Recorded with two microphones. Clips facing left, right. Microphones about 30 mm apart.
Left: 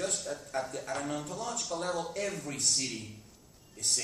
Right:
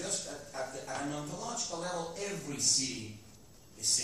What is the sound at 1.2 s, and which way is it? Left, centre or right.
Speech, left.